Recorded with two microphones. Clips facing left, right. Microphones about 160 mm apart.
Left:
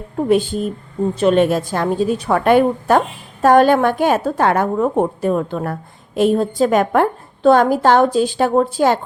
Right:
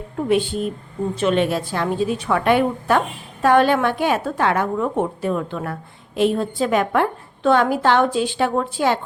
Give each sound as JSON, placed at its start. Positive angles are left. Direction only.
{"t": 0.2, "sound": "a woman's voice", "side_deg": 40}